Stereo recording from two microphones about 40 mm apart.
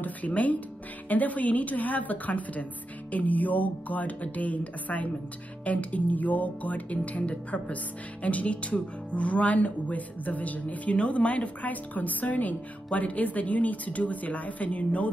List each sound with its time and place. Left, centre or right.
0.0 s a woman's voice: left